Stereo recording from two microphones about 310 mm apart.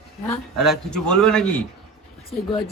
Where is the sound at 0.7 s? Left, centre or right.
Centre.